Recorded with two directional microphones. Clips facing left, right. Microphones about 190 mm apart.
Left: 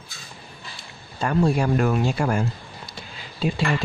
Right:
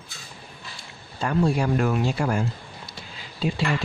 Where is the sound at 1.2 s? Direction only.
45° left (ahead or behind).